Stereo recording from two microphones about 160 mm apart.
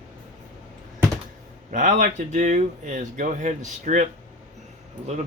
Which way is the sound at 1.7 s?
55° right (ahead or behind).